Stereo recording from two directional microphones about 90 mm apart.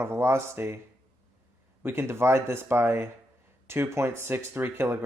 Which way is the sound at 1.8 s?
25° right (ahead or behind).